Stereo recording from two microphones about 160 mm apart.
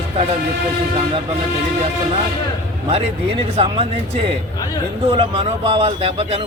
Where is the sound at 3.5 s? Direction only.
35° right (ahead or behind).